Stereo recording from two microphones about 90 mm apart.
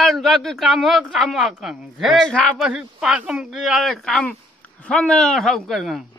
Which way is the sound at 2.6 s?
10° right (ahead or behind).